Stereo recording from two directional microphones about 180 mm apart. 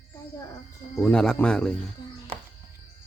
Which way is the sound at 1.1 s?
5° left (ahead or behind).